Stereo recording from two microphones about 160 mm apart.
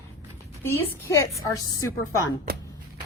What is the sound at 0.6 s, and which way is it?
A woman's voice, 15° left (ahead or behind).